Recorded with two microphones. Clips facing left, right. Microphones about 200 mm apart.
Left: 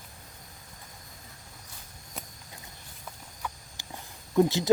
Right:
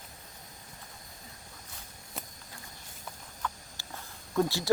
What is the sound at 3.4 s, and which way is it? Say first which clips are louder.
Walk: right 1 dB; 10° left (ahead or behind).